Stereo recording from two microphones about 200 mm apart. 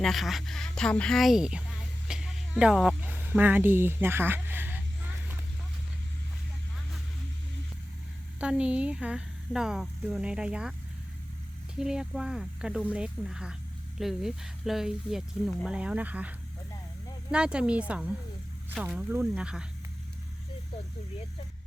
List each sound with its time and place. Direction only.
0.0 s a woman's voice: centre (ahead or behind)
2.0 s a sound: 5° right (ahead or behind)
8.4 s a woman's voice: 5° right (ahead or behind)
11.8 s a woman's voice: 5° right (ahead or behind)
17.3 s a woman's voice: 5° right (ahead or behind)